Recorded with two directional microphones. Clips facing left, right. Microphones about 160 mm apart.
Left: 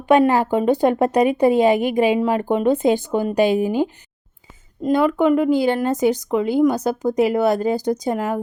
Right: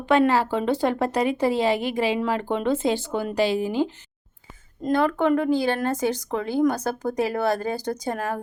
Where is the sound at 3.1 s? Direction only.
45° left (ahead or behind).